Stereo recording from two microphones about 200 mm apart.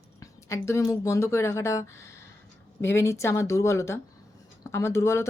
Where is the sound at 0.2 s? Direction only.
15° left (ahead or behind).